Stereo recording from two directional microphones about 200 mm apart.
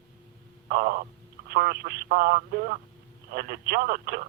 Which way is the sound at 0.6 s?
50° right (ahead or behind).